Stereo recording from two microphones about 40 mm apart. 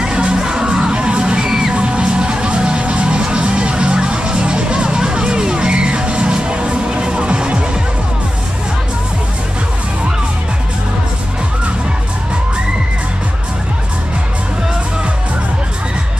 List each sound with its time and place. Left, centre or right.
0.0 s music: centre
1.8 s music: right